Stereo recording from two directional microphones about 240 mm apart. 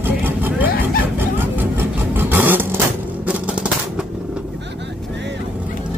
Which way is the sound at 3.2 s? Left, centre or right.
Centre.